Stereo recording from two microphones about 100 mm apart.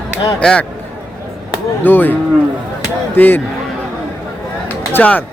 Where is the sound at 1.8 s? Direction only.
20° left (ahead or behind).